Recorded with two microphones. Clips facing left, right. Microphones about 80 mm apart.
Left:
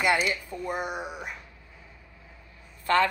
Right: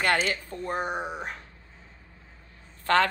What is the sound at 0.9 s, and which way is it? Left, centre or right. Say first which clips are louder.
Speech: right 3 dB; right.